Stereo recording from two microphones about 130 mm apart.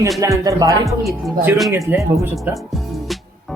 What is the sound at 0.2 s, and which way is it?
Speech, 25° right (ahead or behind).